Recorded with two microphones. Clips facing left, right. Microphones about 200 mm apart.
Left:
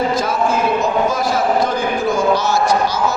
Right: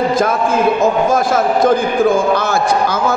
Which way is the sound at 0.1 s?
50° right (ahead or behind).